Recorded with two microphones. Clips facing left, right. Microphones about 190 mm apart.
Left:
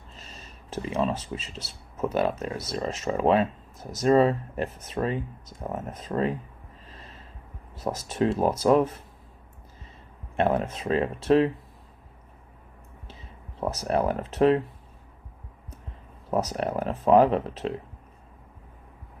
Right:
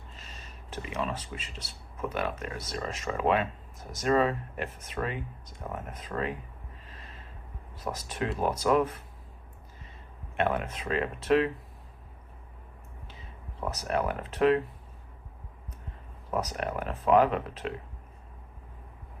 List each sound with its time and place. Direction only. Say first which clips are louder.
0.8 s speech: left 7 dB; 30° left (ahead or behind)
7.9 s speech: left 7 dB; 30° left (ahead or behind)
10.3 s speech: left 5 dB; 35° left (ahead or behind)
13.6 s speech: left 5 dB; 35° left (ahead or behind)
16.3 s speech: left 5 dB; 35° left (ahead or behind)